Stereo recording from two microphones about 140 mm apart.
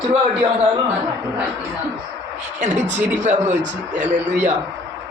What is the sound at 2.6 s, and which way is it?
Speech, 55° right (ahead or behind).